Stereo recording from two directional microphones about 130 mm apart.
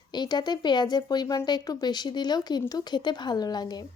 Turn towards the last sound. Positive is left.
turn(degrees=30)  # may be behind; listen again after turning